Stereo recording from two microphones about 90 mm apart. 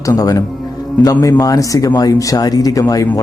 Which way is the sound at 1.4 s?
40° left (ahead or behind).